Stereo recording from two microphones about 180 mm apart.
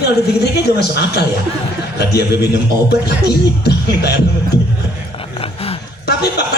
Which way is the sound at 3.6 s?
65° left (ahead or behind).